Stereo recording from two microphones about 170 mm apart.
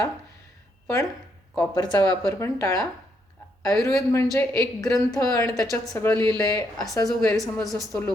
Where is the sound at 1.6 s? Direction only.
25° left (ahead or behind).